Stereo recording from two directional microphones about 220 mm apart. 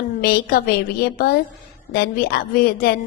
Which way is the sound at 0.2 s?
45° left (ahead or behind).